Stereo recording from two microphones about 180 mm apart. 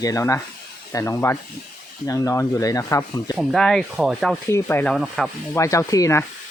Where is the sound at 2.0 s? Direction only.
20° left (ahead or behind).